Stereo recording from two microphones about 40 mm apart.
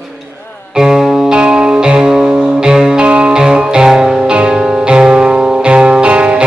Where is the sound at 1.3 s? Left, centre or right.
Right.